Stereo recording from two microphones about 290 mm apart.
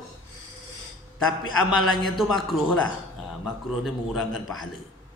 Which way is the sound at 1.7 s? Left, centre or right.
Centre.